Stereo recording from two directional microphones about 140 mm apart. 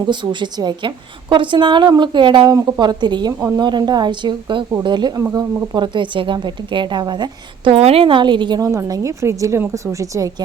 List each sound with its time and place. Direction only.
0.0 s a woman's voice: 35° right (ahead or behind)